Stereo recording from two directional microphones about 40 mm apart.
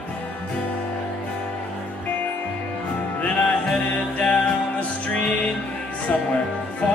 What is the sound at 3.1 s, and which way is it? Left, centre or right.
Music, left.